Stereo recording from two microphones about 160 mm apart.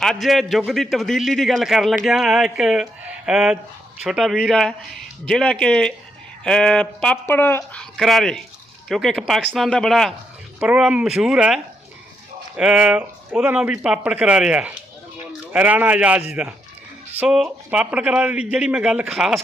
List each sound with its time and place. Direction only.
0.0 s a man's voice: centre (ahead or behind)